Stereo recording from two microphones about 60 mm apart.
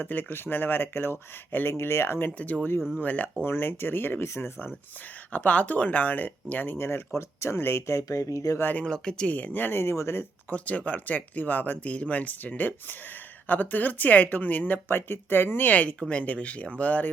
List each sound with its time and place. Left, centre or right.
0.0 s speech: left
3.0 s speech: left
3.4 s speech: left
5.3 s speech: left
8.0 s speech: left
8.8 s speech: centre
9.2 s speech: left
10.5 s speech: left